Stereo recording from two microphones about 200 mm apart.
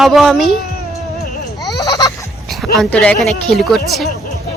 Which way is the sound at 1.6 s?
20° left (ahead or behind).